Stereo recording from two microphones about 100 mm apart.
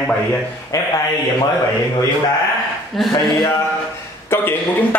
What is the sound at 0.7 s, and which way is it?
Speech, 30° left (ahead or behind).